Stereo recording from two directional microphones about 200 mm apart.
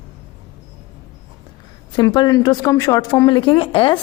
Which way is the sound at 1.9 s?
20° left (ahead or behind).